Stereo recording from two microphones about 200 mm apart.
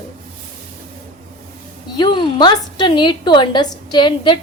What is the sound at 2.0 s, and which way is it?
A woman's voice, 25° left (ahead or behind).